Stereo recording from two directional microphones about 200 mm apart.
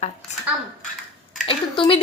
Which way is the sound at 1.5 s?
25° left (ahead or behind).